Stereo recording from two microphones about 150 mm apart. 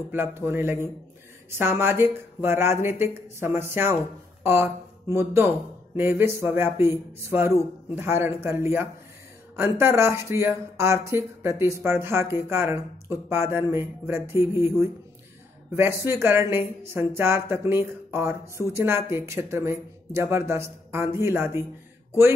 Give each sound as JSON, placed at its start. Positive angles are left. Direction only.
{"t": 0.1, "sound": "speech", "side_deg": -15}